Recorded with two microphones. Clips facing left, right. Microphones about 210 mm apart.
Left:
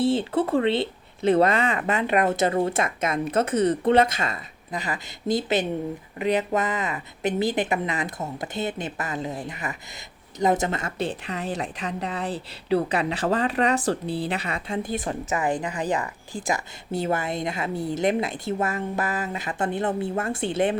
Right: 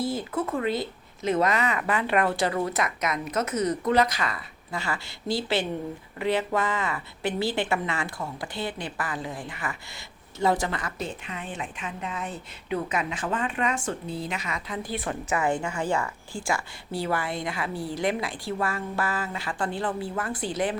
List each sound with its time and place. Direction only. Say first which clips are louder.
0.0 s a woman's voice: left 6 dB; 30° left (ahead or behind)
15.0 s speech: left 1 dB; 20° left (ahead or behind)